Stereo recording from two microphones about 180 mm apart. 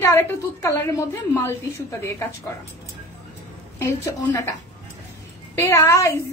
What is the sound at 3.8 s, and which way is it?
Speech, 15° left (ahead or behind).